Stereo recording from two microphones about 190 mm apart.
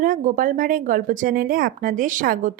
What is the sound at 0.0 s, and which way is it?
A woman's voice, 45° right (ahead or behind).